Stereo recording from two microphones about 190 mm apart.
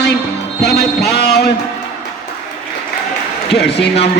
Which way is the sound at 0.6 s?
60° left (ahead or behind).